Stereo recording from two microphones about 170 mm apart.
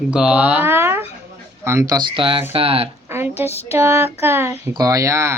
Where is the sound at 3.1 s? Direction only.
15° right (ahead or behind).